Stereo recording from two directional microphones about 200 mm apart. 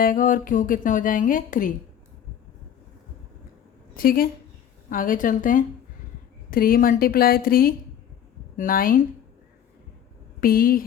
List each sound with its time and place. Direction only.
0.0 s speech: 40° left (ahead or behind)
3.9 s a woman's voice: 45° left (ahead or behind)
10.4 s speech: 45° left (ahead or behind)